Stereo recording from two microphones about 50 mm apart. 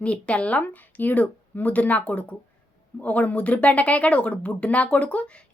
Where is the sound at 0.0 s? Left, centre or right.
Left.